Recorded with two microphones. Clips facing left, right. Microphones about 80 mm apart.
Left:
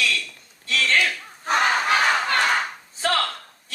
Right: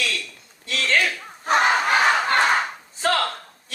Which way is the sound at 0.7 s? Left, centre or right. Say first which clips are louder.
Even; right.